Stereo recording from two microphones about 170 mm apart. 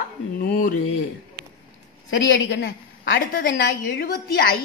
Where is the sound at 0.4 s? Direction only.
60° left (ahead or behind).